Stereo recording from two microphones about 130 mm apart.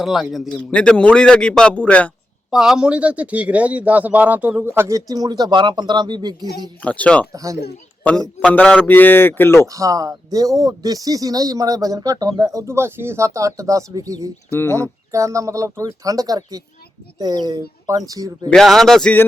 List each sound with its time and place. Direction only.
0.0 s a man's voice: centre (ahead or behind)
2.5 s a man's voice: 5° right (ahead or behind); by 6.3 s 35° right (ahead or behind)
6.8 s a man's voice: 10° left (ahead or behind)
7.3 s speech: 25° right (ahead or behind)
8.4 s a man's voice: 10° left (ahead or behind)
9.6 s speech: 25° right (ahead or behind)
18.4 s speech: centre (ahead or behind)